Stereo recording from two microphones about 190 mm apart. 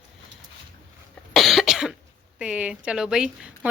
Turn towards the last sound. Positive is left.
turn(degrees=-5)  # may be behind; listen again after turning